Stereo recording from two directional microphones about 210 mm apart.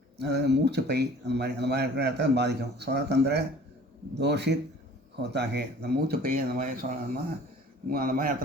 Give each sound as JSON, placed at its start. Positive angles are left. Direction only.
{"t": 0.2, "sound": "speech", "side_deg": -50}